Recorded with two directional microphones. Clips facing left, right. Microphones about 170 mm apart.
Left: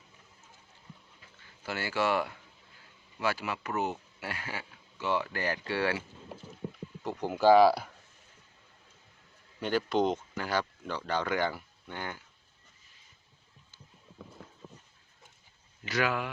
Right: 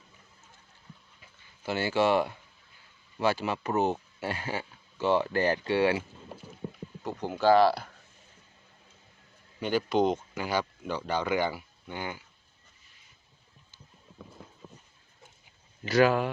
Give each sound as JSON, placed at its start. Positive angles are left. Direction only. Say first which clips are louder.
{"t": 1.2, "sound": "speech", "louder": "right 5 dB", "side_deg": -20}
{"t": 7.0, "sound": "speech", "louder": "left 1 dB", "side_deg": 0}
{"t": 9.6, "sound": "speech", "louder": "right 2 dB", "side_deg": 0}
{"t": 15.8, "sound": "speech", "louder": "right 8 dB", "side_deg": -35}